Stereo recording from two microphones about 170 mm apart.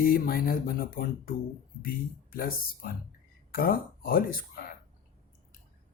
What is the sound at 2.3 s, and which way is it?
Speech, 60° left (ahead or behind).